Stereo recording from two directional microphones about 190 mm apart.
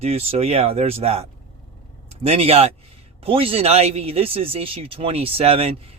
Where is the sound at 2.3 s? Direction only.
30° right (ahead or behind).